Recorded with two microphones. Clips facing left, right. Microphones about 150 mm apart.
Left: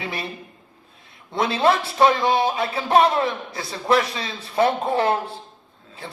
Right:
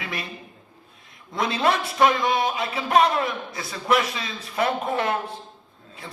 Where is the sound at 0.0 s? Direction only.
30° left (ahead or behind).